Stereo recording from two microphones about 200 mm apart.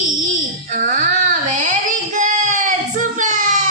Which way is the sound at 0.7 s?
40° right (ahead or behind).